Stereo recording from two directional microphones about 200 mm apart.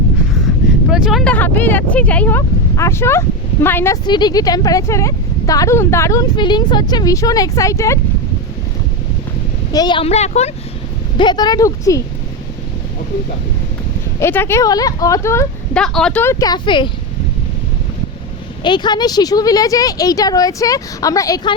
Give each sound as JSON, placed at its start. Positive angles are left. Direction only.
{"t": 0.9, "sound": "speech", "side_deg": -5}
{"t": 4.0, "sound": "speech", "side_deg": 20}
{"t": 9.7, "sound": "speech", "side_deg": 20}
{"t": 11.2, "sound": "speech", "side_deg": 20}
{"t": 14.2, "sound": "speech", "side_deg": 10}
{"t": 15.8, "sound": "speech", "side_deg": 5}
{"t": 18.6, "sound": "speech", "side_deg": 20}